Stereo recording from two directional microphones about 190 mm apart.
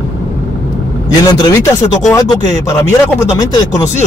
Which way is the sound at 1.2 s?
20° left (ahead or behind).